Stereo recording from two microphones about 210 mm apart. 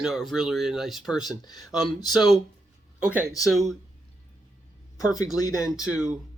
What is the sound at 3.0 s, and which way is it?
Speech, 5° right (ahead or behind).